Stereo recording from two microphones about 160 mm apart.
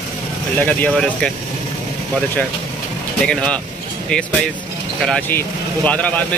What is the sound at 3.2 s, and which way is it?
Speech, 5° left (ahead or behind).